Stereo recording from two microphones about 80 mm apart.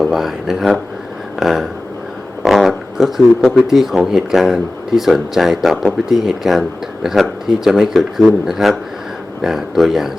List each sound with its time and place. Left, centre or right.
0.0 s speech: centre
1.4 s a sound: centre
3.7 s speech: centre